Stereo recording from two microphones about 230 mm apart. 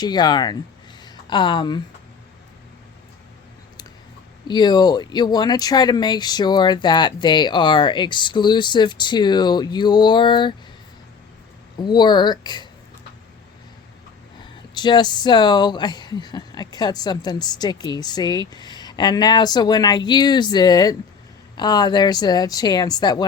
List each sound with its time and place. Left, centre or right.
0.0 s a woman's voice: centre
4.4 s speech: centre
11.8 s speech: centre
14.8 s speech: centre